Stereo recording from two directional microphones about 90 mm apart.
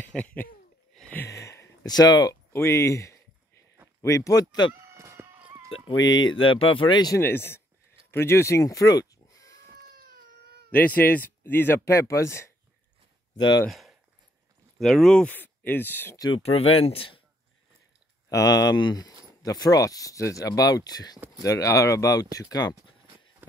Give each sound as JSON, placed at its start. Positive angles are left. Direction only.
{"t": 0.1, "sound": "a sound", "side_deg": 15}
{"t": 1.3, "sound": "a sound", "side_deg": 35}
{"t": 1.9, "sound": "speech", "side_deg": 50}
{"t": 2.5, "sound": "speech", "side_deg": 30}
{"t": 4.9, "sound": "a sound", "side_deg": -35}
{"t": 5.9, "sound": "speech", "side_deg": 70}
{"t": 7.2, "sound": "speech", "side_deg": 25}
{"t": 10.7, "sound": "speech", "side_deg": 20}
{"t": 13.7, "sound": "speech", "side_deg": 0}
{"t": 15.2, "sound": "speech", "side_deg": 20}
{"t": 16.3, "sound": "speech", "side_deg": 80}
{"t": 18.3, "sound": "speech", "side_deg": 40}